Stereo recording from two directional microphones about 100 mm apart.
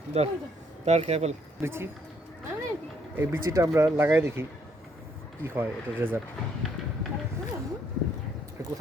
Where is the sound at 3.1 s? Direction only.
25° right (ahead or behind).